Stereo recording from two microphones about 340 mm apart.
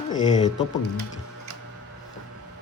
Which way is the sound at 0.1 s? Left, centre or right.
Centre.